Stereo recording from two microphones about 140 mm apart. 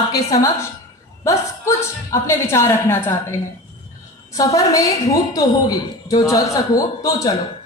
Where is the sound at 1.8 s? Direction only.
20° left (ahead or behind).